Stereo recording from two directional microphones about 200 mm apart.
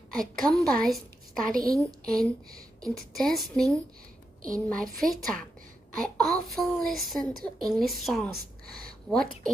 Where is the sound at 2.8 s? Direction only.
Centre (ahead or behind).